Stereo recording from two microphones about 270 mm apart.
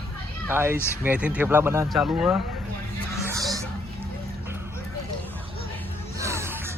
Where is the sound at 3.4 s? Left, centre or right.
Centre.